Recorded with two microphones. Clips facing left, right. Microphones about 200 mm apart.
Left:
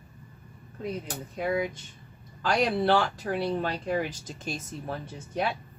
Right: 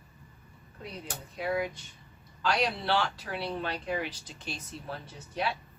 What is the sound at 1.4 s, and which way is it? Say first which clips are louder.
Speech: left 3 dB; 50° left (ahead or behind).